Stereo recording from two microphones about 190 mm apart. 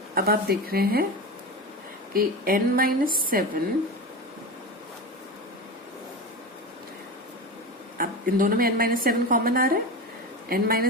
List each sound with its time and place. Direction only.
0.1 s a woman's voice: 50° right (ahead or behind)
2.1 s a woman's voice: 50° right (ahead or behind)
7.9 s a woman's voice: 45° right (ahead or behind)